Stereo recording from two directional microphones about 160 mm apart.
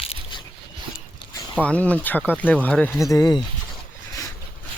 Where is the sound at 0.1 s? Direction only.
30° left (ahead or behind).